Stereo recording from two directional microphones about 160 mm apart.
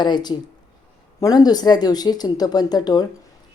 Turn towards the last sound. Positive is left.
turn(degrees=25)  # may be behind; listen again after turning